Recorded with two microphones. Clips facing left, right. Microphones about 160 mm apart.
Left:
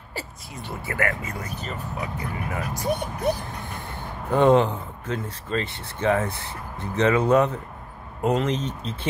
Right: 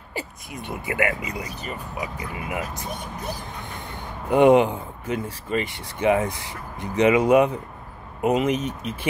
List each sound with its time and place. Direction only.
0.1 s speech: 15° right (ahead or behind)
4.3 s speech: 15° right (ahead or behind)